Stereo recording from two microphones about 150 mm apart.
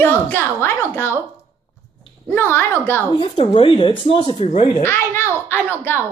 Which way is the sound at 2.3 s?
15° left (ahead or behind).